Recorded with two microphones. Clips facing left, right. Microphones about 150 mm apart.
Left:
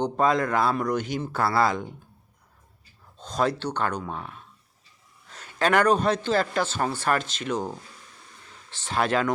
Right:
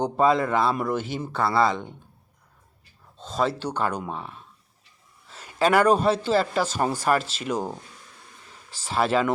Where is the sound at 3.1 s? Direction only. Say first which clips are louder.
Even; centre (ahead or behind).